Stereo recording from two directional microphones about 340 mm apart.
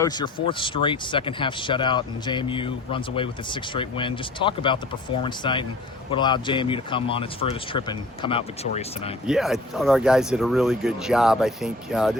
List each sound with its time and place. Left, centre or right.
0.0 s a man's voice: centre
9.2 s speech: centre